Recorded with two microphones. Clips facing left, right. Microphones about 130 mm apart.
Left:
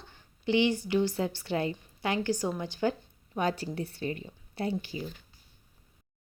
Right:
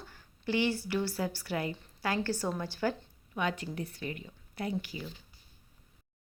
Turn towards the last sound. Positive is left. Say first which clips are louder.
# left 3 dB
turn(degrees=30)  # may be behind; listen again after turning